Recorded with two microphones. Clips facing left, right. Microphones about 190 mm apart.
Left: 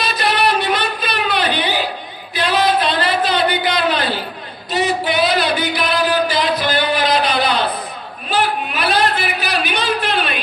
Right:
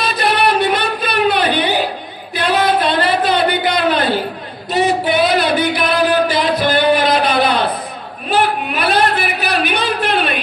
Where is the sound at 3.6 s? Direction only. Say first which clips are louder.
Right 3 dB; 55° right (ahead or behind).